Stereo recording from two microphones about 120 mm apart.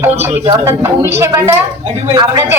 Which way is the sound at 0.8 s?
20° right (ahead or behind).